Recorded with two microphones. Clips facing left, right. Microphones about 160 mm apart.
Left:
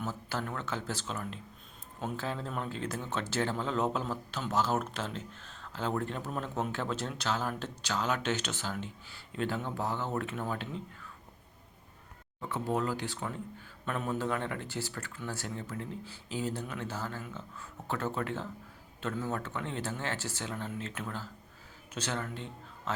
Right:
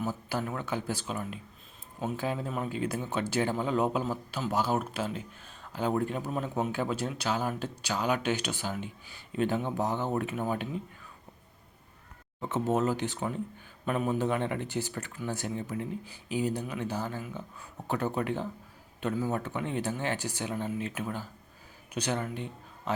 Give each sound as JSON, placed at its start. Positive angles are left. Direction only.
{"t": 0.0, "sound": "speech", "side_deg": -10}
{"t": 12.4, "sound": "speech", "side_deg": -20}